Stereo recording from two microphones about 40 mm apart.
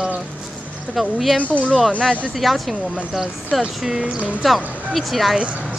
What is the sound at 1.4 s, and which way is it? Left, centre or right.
Speech, left.